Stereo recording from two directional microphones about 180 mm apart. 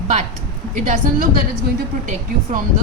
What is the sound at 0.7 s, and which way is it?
Speech, 45° right (ahead or behind).